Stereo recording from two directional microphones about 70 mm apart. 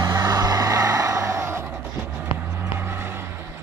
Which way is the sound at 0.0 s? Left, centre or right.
Right.